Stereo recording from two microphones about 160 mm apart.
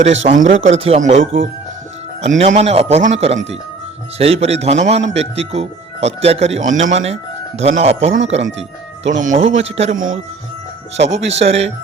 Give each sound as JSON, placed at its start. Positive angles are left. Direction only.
{"t": 0.0, "sound": "a man's voice", "side_deg": -50}
{"t": 9.9, "sound": "speech", "side_deg": -55}
{"t": 10.9, "sound": "a man's voice", "side_deg": -45}